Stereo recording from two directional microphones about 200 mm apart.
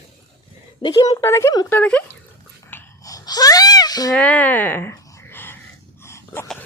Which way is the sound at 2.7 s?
15° left (ahead or behind).